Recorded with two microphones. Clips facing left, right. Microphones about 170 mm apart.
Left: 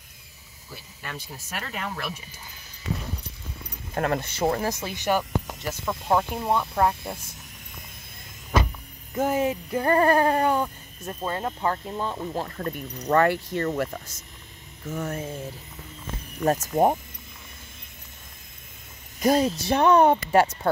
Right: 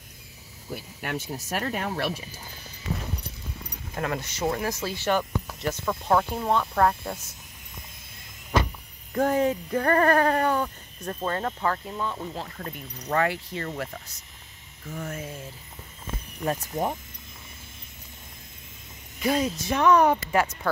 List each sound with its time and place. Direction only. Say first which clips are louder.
1.2 s speech: right 6 dB; 45° right (ahead or behind)
3.9 s speech: left 4 dB; 45° left (ahead or behind)
4.4 s speech: left 2 dB; 35° left (ahead or behind)
4.6 s speech: even; 20° left (ahead or behind)
5.1 s speech: left 3 dB; 5° left (ahead or behind)
9.1 s speech: right 1 dB; 5° left (ahead or behind)
11.6 s speech: left 1 dB; 30° left (ahead or behind)
12.4 s speech: left 6 dB; 45° left (ahead or behind)
14.9 s speech: left 4 dB; 40° left (ahead or behind)
16.4 s speech: left 7 dB; 45° left (ahead or behind)
19.1 s speech: left 4 dB; 40° left (ahead or behind)